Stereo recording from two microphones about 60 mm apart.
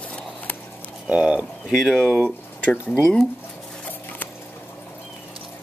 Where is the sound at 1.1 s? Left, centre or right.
Centre.